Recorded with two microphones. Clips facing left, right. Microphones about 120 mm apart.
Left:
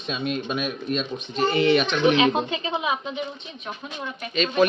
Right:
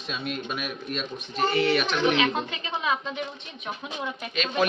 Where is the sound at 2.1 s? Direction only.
20° left (ahead or behind).